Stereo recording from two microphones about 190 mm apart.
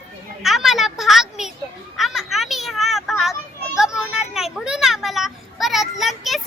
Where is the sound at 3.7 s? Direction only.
5° right (ahead or behind).